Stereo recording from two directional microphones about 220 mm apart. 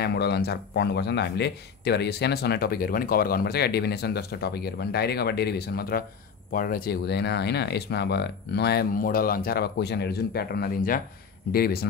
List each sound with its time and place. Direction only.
0.0 s speech: 45° left (ahead or behind)